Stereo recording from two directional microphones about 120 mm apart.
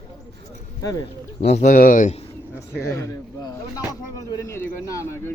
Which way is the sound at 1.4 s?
75° left (ahead or behind).